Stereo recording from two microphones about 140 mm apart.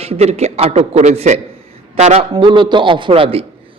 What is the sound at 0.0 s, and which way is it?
A man's voice, 45° right (ahead or behind).